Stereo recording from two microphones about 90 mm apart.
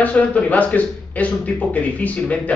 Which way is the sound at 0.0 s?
15° left (ahead or behind).